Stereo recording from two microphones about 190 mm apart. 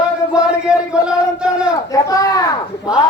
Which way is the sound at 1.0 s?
5° right (ahead or behind).